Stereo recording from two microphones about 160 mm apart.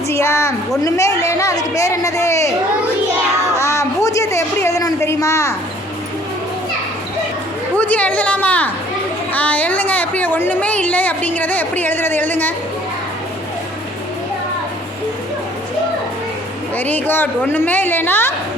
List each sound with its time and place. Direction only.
0.1 s a woman's voice: 15° left (ahead or behind)
3.6 s a woman's voice: 15° left (ahead or behind)
7.8 s a woman's voice: 10° left (ahead or behind)
16.7 s a woman's voice: 10° left (ahead or behind)